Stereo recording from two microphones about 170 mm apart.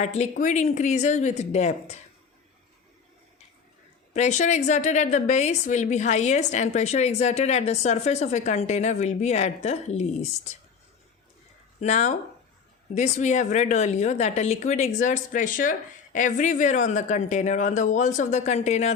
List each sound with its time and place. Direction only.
0.0 s a woman's voice: 45° left (ahead or behind)
4.1 s a woman's voice: 45° left (ahead or behind)
11.8 s a woman's voice: 40° left (ahead or behind)